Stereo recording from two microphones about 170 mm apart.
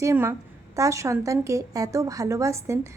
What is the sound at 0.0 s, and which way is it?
A woman's voice, 15° right (ahead or behind).